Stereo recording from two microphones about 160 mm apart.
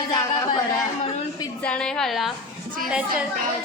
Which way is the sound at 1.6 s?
5° left (ahead or behind).